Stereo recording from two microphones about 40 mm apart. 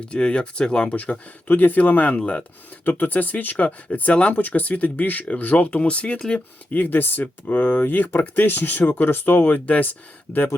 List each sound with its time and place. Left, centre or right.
0.0 s speech: left
0.9 s speech: left
1.5 s speech: left
2.8 s speech: left
4.4 s speech: left
6.7 s speech: left